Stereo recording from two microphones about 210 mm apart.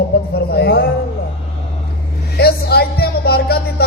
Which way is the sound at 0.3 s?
50° left (ahead or behind).